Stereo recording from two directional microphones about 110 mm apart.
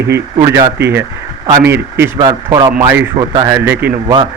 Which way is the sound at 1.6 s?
20° right (ahead or behind).